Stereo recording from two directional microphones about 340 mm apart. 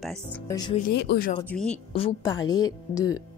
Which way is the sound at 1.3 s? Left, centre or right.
Centre.